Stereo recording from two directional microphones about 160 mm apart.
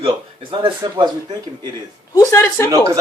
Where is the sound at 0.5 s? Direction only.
30° right (ahead or behind).